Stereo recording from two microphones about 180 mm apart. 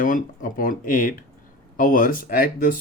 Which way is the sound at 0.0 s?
50° left (ahead or behind).